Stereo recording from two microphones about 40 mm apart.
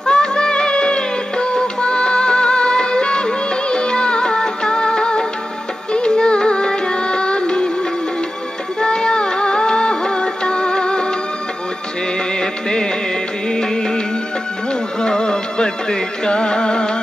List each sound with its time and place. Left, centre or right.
0.0 s music: centre
8.7 s music: centre
12.4 s music: centre